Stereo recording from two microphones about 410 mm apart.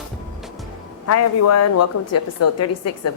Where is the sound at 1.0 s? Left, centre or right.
Left.